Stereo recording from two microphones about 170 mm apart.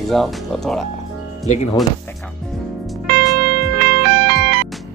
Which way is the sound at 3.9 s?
70° right (ahead or behind).